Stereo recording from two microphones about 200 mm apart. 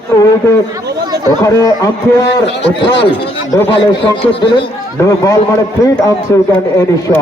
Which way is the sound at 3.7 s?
25° left (ahead or behind).